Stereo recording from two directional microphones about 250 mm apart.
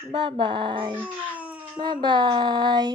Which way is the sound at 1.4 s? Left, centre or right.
Centre.